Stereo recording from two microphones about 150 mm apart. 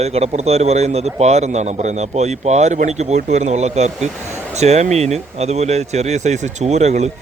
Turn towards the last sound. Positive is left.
turn(degrees=-45)  # may be behind; listen again after turning